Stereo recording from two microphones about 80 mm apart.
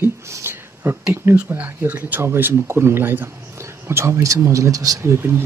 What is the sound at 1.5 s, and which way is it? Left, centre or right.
Speech, right.